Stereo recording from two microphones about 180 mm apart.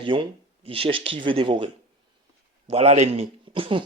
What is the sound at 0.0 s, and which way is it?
Speech, 30° right (ahead or behind).